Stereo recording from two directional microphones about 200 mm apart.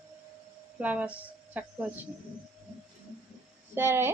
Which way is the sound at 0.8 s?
5° right (ahead or behind).